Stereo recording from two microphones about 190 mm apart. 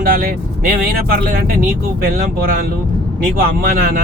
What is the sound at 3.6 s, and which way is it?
Speech, 50° right (ahead or behind).